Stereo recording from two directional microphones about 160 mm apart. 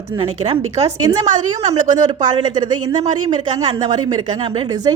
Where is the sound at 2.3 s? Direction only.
25° right (ahead or behind).